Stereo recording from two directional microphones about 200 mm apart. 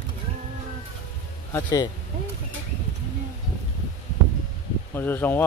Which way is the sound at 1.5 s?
20° left (ahead or behind).